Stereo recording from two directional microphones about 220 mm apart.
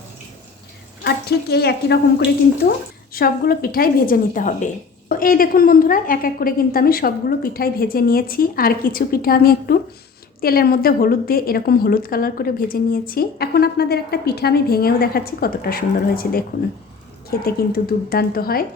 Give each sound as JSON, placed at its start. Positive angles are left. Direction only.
{"t": 1.0, "sound": "a woman's voice", "side_deg": 50}
{"t": 17.4, "sound": "a woman's voice", "side_deg": 45}